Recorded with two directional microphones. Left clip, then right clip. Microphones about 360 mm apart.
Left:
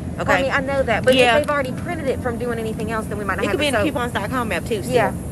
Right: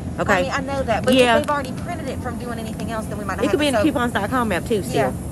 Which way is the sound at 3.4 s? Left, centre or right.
Right.